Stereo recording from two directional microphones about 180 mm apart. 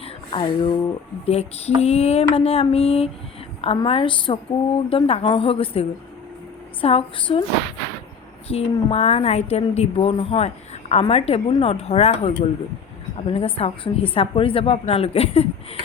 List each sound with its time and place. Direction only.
0.0 s speech: 30° left (ahead or behind)
6.8 s speech: 30° left (ahead or behind)
8.4 s speech: 35° left (ahead or behind)